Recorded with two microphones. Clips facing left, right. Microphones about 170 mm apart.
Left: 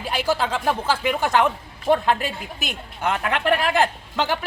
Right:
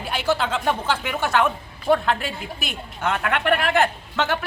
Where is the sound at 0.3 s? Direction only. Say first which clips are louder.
Right 1 dB; 10° left (ahead or behind).